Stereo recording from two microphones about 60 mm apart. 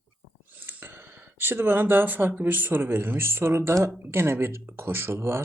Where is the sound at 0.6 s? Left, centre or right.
Right.